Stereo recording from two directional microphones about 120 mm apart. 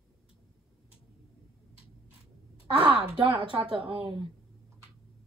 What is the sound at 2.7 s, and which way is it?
Speech, 45° right (ahead or behind).